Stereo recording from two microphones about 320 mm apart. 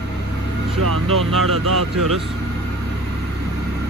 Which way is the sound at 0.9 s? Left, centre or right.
Right.